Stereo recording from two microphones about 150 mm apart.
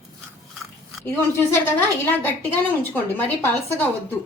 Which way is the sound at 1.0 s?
15° left (ahead or behind).